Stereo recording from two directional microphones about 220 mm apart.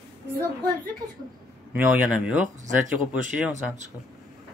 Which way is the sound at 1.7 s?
5° right (ahead or behind).